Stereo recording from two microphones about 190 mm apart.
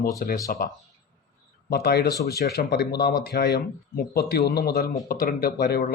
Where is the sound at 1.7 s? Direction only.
55° left (ahead or behind).